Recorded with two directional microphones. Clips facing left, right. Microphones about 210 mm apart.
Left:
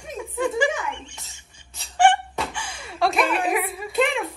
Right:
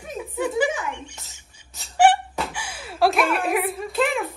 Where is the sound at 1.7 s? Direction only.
5° right (ahead or behind).